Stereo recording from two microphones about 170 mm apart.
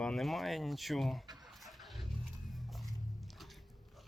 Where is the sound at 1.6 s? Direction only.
Centre (ahead or behind).